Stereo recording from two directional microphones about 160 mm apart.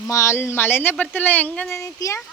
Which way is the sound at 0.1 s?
20° left (ahead or behind).